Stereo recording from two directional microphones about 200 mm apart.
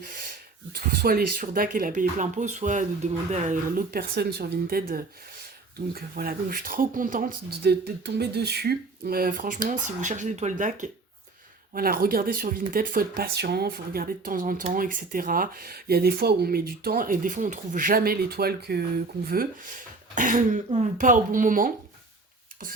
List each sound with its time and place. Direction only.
0.0 s speech: 45° right (ahead or behind)